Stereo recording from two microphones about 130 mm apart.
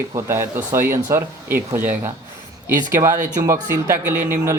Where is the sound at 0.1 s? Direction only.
20° right (ahead or behind).